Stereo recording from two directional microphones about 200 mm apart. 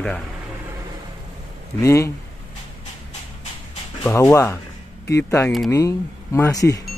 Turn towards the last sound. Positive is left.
turn(degrees=15)  # may be behind; listen again after turning